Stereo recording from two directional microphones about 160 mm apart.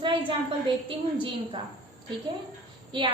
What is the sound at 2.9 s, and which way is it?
Speech, 30° right (ahead or behind).